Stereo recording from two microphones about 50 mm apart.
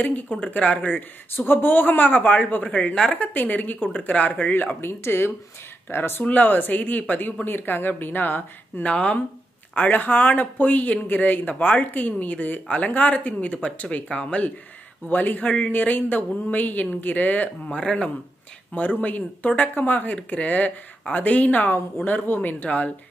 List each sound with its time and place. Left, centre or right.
0.0 s speech: left
1.3 s speech: left
2.9 s speech: centre
3.2 s speech: left
4.8 s speech: left
6.2 s speech: left
8.8 s speech: left
9.8 s speech: left
17.6 s speech: centre
18.7 s speech: left
21.7 s speech: left